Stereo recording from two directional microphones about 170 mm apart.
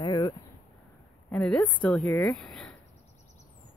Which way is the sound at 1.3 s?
5° left (ahead or behind).